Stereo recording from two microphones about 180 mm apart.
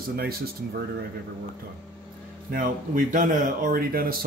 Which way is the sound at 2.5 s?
50° right (ahead or behind).